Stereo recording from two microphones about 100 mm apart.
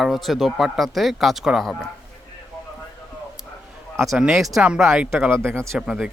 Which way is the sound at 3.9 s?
Centre (ahead or behind).